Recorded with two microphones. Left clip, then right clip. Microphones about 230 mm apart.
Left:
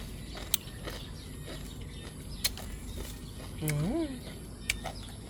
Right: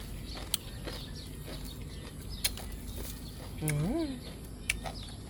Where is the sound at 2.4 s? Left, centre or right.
Centre.